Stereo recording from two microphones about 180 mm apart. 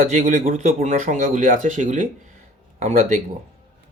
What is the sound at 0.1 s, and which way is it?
Speech, 40° right (ahead or behind).